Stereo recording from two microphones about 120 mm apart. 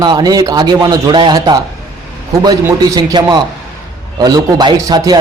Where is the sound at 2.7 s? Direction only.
35° right (ahead or behind).